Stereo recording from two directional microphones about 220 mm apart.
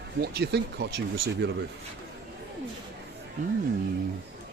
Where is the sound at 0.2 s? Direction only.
45° right (ahead or behind).